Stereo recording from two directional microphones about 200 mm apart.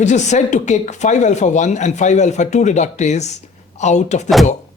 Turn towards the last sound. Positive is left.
turn(degrees=35)  # may be behind; listen again after turning